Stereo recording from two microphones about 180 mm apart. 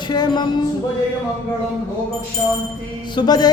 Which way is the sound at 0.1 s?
25° left (ahead or behind).